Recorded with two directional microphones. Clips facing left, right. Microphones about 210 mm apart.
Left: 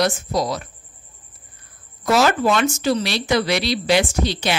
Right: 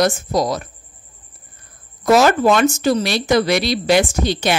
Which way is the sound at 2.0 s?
45° right (ahead or behind).